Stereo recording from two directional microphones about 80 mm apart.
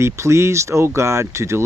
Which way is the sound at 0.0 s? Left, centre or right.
Right.